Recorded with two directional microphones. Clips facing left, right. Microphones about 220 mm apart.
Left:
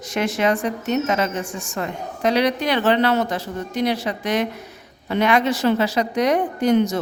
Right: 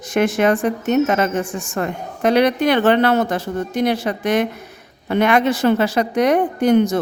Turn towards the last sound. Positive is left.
turn(degrees=-55)  # may be behind; listen again after turning